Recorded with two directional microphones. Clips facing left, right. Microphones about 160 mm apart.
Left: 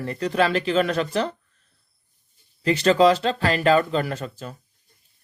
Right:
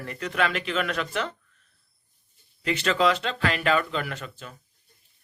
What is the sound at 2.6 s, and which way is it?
Speech, 35° left (ahead or behind).